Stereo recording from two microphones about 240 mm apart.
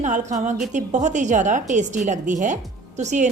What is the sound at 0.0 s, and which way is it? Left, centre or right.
A woman's voice, right.